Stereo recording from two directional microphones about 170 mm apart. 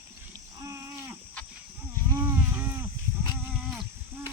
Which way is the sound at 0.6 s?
20° right (ahead or behind).